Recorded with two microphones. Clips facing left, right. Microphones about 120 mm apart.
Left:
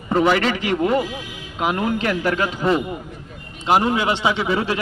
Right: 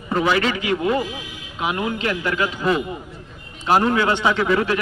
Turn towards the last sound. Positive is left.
turn(degrees=15)  # may be behind; listen again after turning